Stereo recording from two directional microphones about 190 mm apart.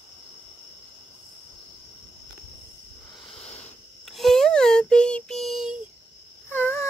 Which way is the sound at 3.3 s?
5° left (ahead or behind).